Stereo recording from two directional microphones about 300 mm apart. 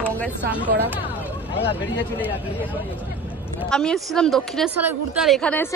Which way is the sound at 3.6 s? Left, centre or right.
Centre.